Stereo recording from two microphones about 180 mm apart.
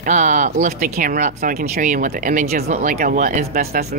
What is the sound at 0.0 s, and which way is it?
Speech, 45° right (ahead or behind).